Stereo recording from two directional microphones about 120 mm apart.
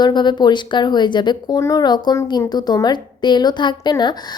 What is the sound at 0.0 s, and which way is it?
Speech, 40° left (ahead or behind).